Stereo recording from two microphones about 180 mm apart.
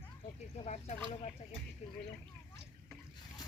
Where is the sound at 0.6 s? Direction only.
40° left (ahead or behind).